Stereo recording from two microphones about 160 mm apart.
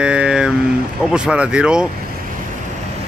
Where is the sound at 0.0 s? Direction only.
5° right (ahead or behind).